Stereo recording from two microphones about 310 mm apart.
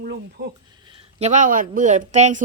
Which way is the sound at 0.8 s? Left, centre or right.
Centre.